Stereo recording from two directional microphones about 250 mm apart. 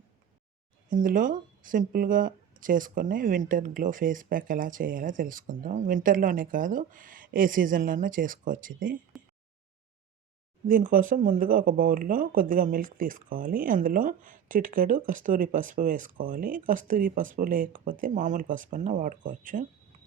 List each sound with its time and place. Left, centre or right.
0.9 s speech: right
9.1 s a sound: centre
10.7 s speech: right